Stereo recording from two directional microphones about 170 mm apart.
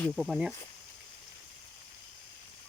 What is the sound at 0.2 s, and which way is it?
Speech, 5° right (ahead or behind).